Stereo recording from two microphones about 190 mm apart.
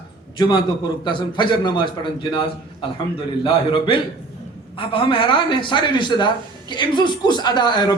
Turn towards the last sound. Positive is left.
turn(degrees=20)  # may be behind; listen again after turning